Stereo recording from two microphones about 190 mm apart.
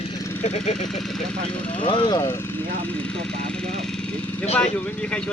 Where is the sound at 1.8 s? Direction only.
25° left (ahead or behind).